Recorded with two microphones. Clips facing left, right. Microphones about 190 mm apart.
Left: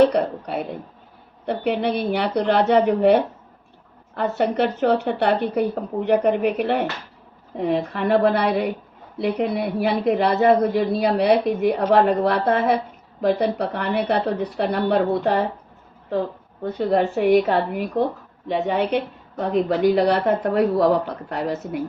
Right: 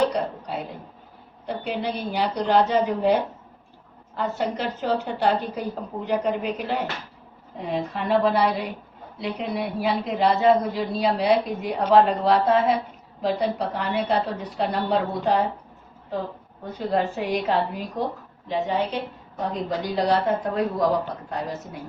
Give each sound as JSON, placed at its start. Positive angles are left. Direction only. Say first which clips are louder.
{"t": 0.0, "sound": "speech", "louder": "left 7 dB", "side_deg": 65}
{"t": 16.9, "sound": "speech", "louder": "left 7 dB", "side_deg": 60}